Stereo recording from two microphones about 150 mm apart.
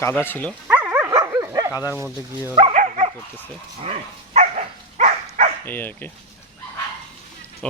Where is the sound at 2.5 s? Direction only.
40° right (ahead or behind).